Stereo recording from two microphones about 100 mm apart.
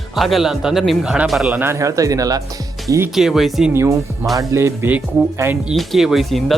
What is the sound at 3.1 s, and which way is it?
Speech, 5° right (ahead or behind).